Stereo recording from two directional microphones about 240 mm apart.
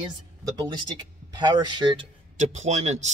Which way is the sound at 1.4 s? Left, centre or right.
Centre.